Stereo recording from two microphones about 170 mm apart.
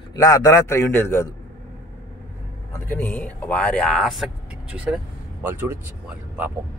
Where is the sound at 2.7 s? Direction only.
10° left (ahead or behind); by 6.5 s 10° right (ahead or behind).